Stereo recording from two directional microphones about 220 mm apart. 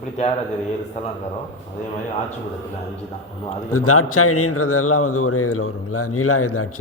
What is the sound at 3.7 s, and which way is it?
Speech, 80° left.